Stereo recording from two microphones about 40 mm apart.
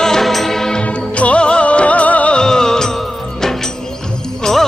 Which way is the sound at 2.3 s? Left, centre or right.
Centre.